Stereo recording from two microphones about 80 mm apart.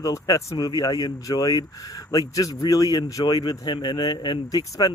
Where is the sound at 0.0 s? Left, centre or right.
Left.